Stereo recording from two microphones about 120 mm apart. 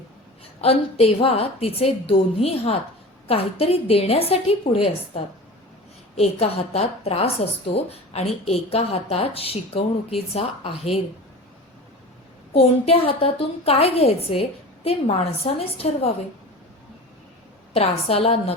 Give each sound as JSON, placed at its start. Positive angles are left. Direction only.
{"t": 0.6, "sound": "a woman's voice", "side_deg": 55}
{"t": 12.5, "sound": "a woman's voice", "side_deg": 55}
{"t": 17.7, "sound": "a woman's voice", "side_deg": 55}